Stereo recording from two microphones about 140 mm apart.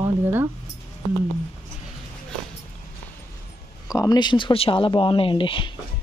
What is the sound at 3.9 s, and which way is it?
Speech, 25° left (ahead or behind).